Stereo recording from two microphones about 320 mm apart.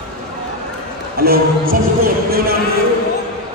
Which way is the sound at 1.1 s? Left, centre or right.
Right.